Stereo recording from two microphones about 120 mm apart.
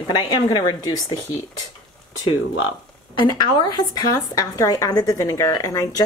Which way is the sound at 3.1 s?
35° left (ahead or behind).